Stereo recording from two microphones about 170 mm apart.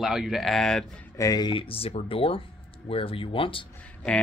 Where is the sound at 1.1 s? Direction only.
20° left (ahead or behind).